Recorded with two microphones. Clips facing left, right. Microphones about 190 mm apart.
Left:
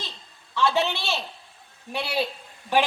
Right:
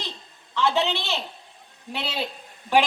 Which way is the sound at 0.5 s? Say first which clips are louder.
Even; 20° right (ahead or behind).